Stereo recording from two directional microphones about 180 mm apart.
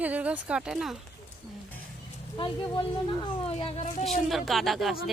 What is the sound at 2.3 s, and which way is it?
Speech, 25° left (ahead or behind).